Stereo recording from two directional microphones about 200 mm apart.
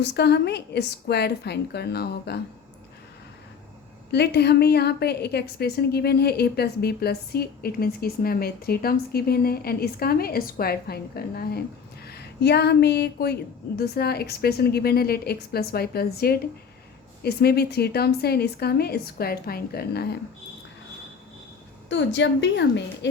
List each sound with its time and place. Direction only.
0.0 s a woman's voice: 55° left (ahead or behind)
4.1 s a woman's voice: 55° left (ahead or behind)
21.8 s a woman's voice: 65° left (ahead or behind)